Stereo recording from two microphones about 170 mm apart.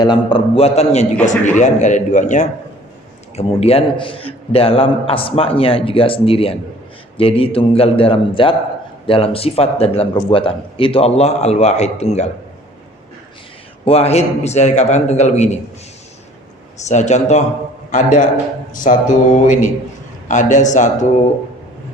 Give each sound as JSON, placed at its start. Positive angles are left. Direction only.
{"t": 0.0, "sound": "a man's voice", "side_deg": 25}
{"t": 3.3, "sound": "a man's voice", "side_deg": 35}
{"t": 13.8, "sound": "a man's voice", "side_deg": 35}
{"t": 16.8, "sound": "a man's voice", "side_deg": 45}